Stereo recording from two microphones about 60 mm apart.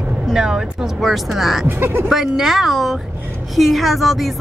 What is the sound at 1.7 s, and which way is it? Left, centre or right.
Speech, right.